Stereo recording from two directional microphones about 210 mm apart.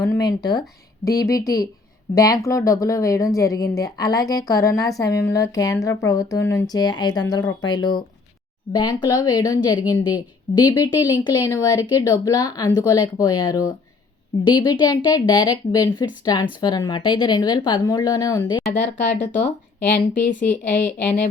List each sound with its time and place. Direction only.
0.0 s speech: 15° left (ahead or behind)
19.0 s speech: 55° left (ahead or behind)
20.5 s speech: 35° left (ahead or behind)